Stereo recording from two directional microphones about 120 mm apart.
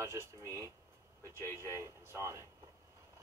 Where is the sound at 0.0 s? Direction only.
25° right (ahead or behind).